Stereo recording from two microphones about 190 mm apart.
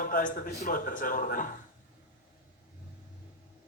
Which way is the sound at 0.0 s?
45° left (ahead or behind).